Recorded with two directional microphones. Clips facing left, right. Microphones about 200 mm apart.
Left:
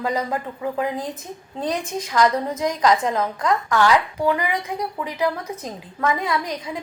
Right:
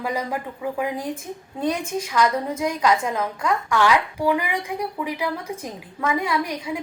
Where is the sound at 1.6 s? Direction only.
10° right (ahead or behind).